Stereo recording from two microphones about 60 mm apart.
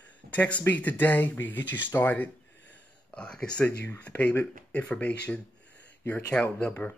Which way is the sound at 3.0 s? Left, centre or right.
Centre.